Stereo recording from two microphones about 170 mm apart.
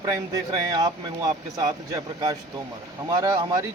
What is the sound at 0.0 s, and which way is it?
Speech, 20° right (ahead or behind).